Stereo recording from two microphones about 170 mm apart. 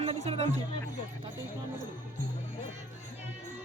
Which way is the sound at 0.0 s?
35° right (ahead or behind).